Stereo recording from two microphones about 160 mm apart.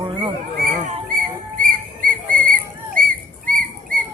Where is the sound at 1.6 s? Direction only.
60° right (ahead or behind).